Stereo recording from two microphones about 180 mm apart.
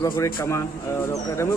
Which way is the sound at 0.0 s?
15° left (ahead or behind).